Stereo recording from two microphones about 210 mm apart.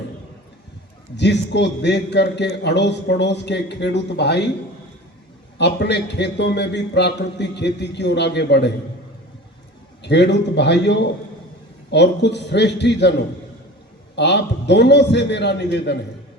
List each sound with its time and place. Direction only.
1.1 s a man's voice: 55° left (ahead or behind)
5.5 s a man's voice: 55° left (ahead or behind)
10.0 s a man's voice: 55° left (ahead or behind)